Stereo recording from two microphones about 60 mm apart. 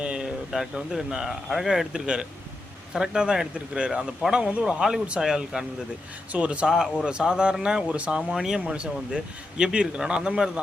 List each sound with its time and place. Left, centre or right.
0.0 s a sound: centre
0.5 s a man's voice: centre
1.9 s speech: centre
6.3 s speech: right
8.3 s speech: centre